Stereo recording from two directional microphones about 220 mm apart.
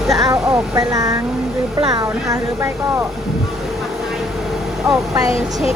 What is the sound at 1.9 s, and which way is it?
A woman's voice, 15° right (ahead or behind).